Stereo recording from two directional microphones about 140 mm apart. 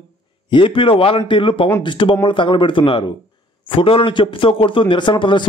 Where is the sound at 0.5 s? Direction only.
35° left (ahead or behind).